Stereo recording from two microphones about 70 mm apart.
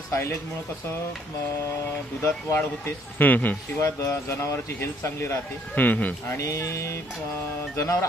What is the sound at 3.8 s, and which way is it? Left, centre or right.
Speech, left.